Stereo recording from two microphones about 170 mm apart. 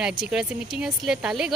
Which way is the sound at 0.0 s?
5° right (ahead or behind).